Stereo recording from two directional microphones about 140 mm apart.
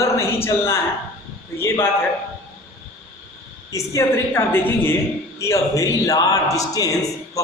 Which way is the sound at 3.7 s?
20° left (ahead or behind).